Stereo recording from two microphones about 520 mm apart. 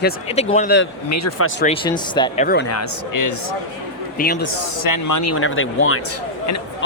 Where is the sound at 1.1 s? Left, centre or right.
Left.